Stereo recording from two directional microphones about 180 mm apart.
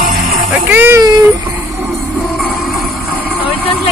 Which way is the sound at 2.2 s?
Centre (ahead or behind).